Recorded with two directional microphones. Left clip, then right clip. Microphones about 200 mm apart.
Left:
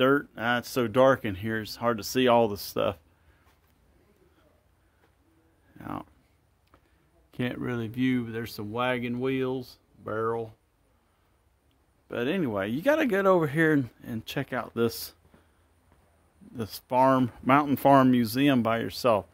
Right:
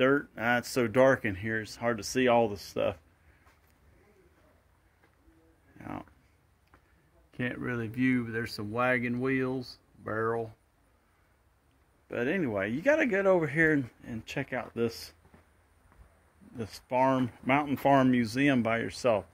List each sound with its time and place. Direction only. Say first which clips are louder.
0.2 s speech: left 1 dB; 10° left (ahead or behind); by 3.0 s 25° left (ahead or behind)
5.8 s speech: left 4 dB; 20° left (ahead or behind)
7.2 s speech: left 2 dB; 30° left (ahead or behind); by 10.5 s centre (ahead or behind)
12.1 s speech: left 2 dB; 20° left (ahead or behind)
16.5 s speech: left 4 dB; 25° left (ahead or behind)